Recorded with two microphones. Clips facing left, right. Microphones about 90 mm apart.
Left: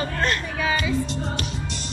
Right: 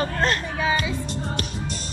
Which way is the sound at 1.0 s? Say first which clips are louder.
Left 1 dB; 45° right (ahead or behind).